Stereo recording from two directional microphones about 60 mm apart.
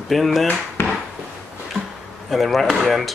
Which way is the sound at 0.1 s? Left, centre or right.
Centre.